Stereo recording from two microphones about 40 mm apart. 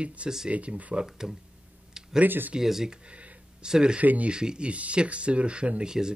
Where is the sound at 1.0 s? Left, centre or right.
Centre.